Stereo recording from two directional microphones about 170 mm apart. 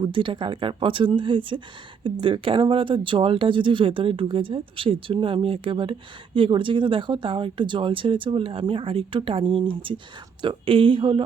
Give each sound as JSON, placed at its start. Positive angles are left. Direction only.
{"t": 0.0, "sound": "speech", "side_deg": -30}